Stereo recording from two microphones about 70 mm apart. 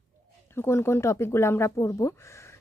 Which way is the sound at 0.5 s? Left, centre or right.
Left.